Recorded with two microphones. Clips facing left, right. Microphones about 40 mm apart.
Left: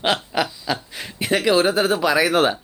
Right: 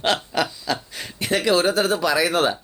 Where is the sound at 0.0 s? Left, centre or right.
Centre.